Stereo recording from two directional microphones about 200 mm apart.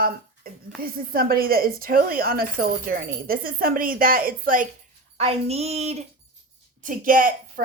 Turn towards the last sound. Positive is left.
turn(degrees=-45)  # may be behind; listen again after turning